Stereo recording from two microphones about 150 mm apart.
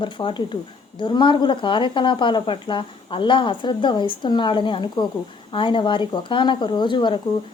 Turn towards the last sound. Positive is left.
turn(degrees=30)  # may be behind; listen again after turning